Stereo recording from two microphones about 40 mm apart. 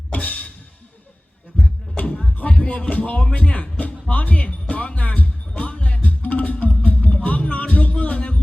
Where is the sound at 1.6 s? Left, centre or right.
Centre.